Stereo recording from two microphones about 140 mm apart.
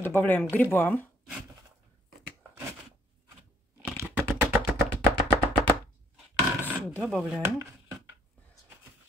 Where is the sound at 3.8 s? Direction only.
15° right (ahead or behind).